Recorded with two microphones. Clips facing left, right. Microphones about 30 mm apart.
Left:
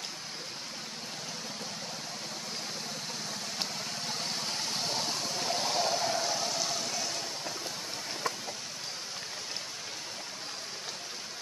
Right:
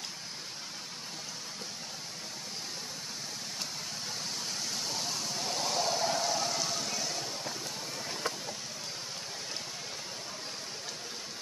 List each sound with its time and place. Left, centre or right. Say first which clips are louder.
4.2 s vehicle: left 2 dB; left
5.0 s a sound: left 2 dB; left
6.0 s vehicle: even; centre